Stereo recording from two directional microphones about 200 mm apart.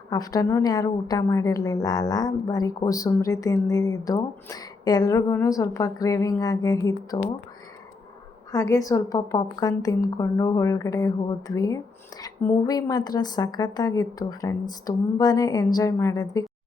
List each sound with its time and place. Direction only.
0.1 s a woman's voice: 20° left (ahead or behind)
8.5 s a woman's voice: 15° left (ahead or behind)